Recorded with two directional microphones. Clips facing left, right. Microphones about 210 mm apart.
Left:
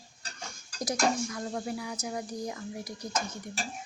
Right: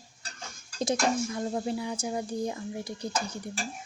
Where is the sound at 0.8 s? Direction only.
25° right (ahead or behind).